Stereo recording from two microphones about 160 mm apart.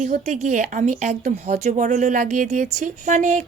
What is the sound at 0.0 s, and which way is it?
A woman's voice, 50° right (ahead or behind).